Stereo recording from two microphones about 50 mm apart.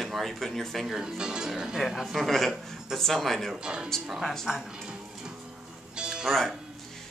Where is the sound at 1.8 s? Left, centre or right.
Centre.